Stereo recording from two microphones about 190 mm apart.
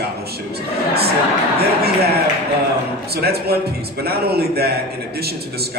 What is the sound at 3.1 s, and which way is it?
A man's voice, 55° right (ahead or behind).